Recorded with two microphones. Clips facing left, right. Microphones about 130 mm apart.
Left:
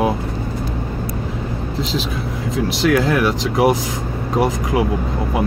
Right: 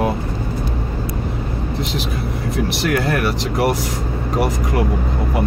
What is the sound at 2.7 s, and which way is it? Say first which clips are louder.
Speech: left 5 dB; 90° left.